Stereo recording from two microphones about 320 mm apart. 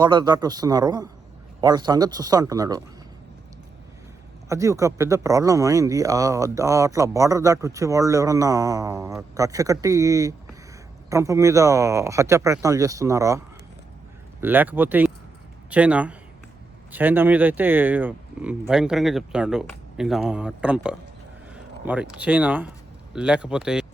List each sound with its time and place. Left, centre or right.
0.0 s speech: centre
4.4 s speech: centre
14.4 s speech: centre